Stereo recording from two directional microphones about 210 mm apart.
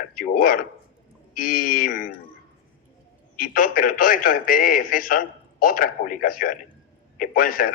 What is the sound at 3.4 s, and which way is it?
A man's voice, 40° left (ahead or behind).